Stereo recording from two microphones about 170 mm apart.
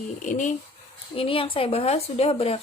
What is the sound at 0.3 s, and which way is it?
Speech, 45° left (ahead or behind).